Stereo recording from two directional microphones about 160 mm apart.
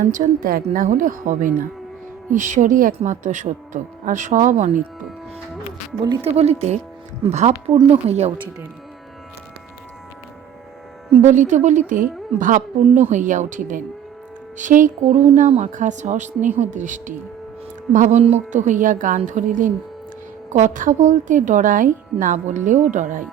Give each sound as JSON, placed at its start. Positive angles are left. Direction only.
{"t": 0.0, "sound": "a woman's voice", "side_deg": -55}
{"t": 6.1, "sound": "a woman's voice", "side_deg": -40}
{"t": 11.1, "sound": "a woman's voice", "side_deg": -50}